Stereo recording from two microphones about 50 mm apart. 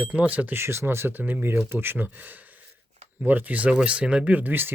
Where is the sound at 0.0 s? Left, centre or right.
Right.